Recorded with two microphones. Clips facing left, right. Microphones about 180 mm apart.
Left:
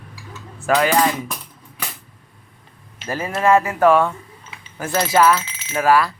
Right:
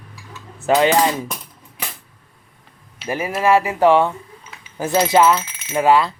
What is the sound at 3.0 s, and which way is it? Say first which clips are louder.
Speech: right 1 dB; 15° right (ahead or behind).